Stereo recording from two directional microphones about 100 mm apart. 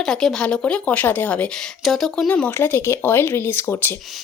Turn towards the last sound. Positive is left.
turn(degrees=20)  # may be behind; listen again after turning